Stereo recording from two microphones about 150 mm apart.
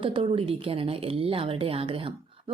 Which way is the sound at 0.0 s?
35° right (ahead or behind).